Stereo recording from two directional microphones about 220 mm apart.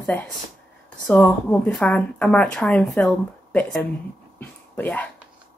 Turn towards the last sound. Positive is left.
turn(degrees=5)  # may be behind; listen again after turning